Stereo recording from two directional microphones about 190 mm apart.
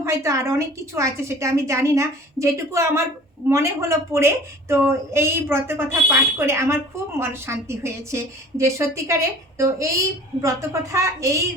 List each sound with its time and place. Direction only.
0.0 s a woman's voice: 15° right (ahead or behind)